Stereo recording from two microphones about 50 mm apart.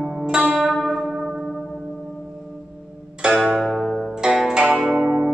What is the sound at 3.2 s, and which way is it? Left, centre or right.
Music, right.